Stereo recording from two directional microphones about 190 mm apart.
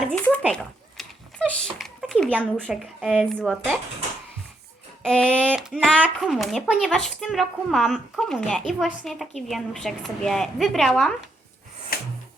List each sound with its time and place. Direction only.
0.0 s a sound: 5° left (ahead or behind)
0.5 s dog: 5° left (ahead or behind)
1.8 s speech: centre (ahead or behind)
5.0 s speech: 5° left (ahead or behind)
11.9 s gasp: 50° left (ahead or behind)